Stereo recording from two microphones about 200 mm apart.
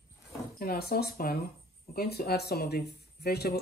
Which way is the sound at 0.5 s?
50° left (ahead or behind).